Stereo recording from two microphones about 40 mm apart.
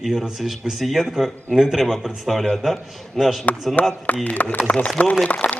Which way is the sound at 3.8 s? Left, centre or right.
Left.